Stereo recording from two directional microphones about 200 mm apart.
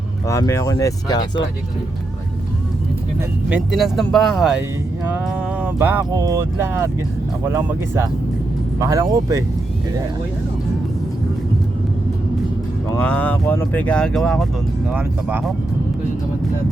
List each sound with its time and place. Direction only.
0.3 s speech: 15° left (ahead or behind)
3.5 s speech: centre (ahead or behind)
12.9 s speech: 10° left (ahead or behind); by 15.5 s 5° right (ahead or behind)